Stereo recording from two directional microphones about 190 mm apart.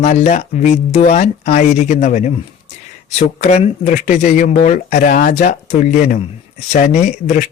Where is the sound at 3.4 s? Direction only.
35° left (ahead or behind).